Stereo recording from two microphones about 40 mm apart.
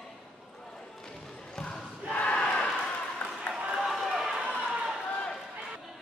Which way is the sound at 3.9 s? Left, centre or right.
Centre.